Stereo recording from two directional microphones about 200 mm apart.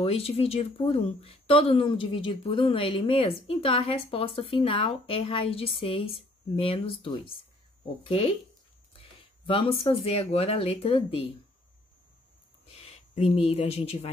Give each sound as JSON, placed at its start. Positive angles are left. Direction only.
{"t": 0.0, "sound": "speech", "side_deg": 30}
{"t": 9.5, "sound": "speech", "side_deg": 25}
{"t": 12.8, "sound": "speech", "side_deg": 30}